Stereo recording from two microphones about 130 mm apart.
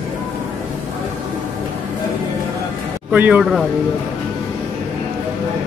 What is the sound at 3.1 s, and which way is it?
Speech, 10° right (ahead or behind).